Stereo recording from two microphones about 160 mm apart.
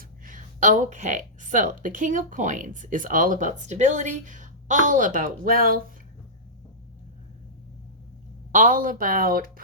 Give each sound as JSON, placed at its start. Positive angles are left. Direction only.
{"t": 0.0, "sound": "speech", "side_deg": -55}
{"t": 8.5, "sound": "speech", "side_deg": -55}